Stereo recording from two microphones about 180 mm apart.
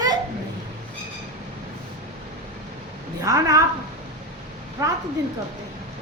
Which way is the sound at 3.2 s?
20° right (ahead or behind).